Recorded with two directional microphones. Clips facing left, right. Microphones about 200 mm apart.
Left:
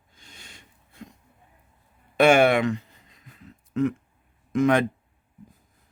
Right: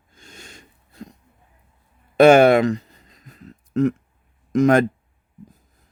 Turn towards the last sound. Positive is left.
turn(degrees=-40)  # may be behind; listen again after turning